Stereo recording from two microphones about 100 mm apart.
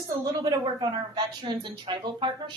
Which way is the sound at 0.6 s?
45° right (ahead or behind).